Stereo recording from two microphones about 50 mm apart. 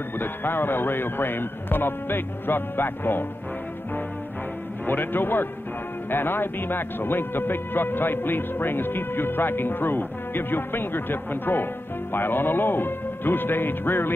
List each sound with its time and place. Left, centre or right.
0.2 s speech: left
4.8 s speech: left